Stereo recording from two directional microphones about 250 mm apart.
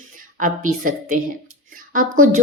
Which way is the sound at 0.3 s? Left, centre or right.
Right.